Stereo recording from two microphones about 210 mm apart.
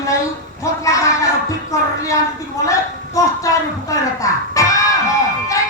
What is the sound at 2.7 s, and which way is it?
Speech, 15° left (ahead or behind).